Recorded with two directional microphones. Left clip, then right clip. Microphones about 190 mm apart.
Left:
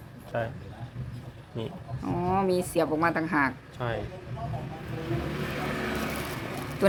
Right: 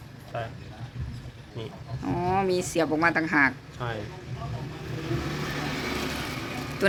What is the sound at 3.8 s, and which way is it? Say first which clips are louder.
Speech: left 2 dB; 30° left (ahead or behind).